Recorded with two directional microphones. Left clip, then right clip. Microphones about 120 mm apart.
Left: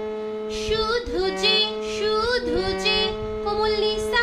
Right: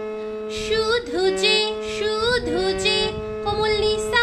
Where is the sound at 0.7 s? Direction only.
40° right (ahead or behind).